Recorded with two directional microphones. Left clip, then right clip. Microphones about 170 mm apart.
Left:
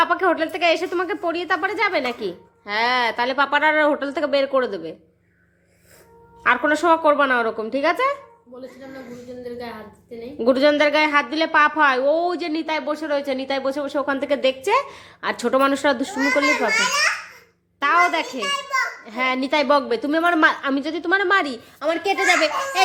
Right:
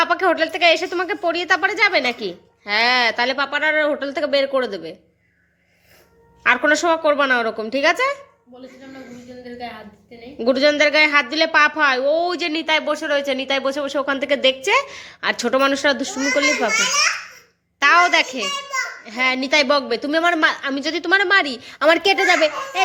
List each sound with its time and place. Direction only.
0.0 s a woman's voice: centre (ahead or behind)
3.3 s a woman's voice: 10° left (ahead or behind)
6.4 s a woman's voice: centre (ahead or behind)
10.3 s a woman's voice: 5° left (ahead or behind)
20.8 s a woman's voice: centre (ahead or behind)
21.8 s speech: 30° right (ahead or behind)
22.4 s a child's voice: 15° right (ahead or behind)